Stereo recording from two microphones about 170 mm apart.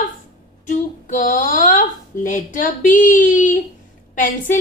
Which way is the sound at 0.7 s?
50° left (ahead or behind).